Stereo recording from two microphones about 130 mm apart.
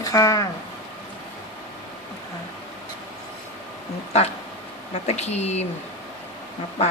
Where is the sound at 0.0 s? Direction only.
25° left (ahead or behind).